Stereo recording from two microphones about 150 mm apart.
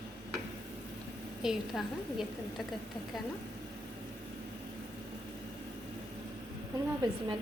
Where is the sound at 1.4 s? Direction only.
5° right (ahead or behind).